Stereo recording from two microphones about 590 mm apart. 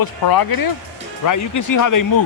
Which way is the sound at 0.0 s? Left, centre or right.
Left.